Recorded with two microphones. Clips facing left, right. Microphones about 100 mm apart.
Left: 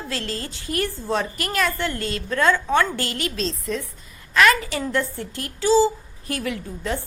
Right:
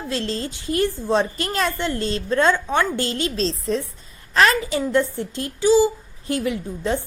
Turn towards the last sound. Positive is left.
turn(degrees=-20)  # may be behind; listen again after turning